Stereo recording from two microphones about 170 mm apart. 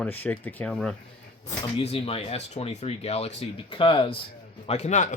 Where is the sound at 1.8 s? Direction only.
35° left (ahead or behind).